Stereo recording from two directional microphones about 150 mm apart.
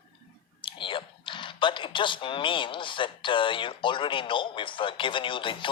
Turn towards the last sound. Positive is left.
turn(degrees=35)  # may be behind; listen again after turning